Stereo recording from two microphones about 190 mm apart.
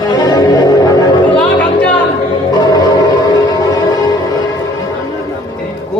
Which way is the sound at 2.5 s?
20° left (ahead or behind).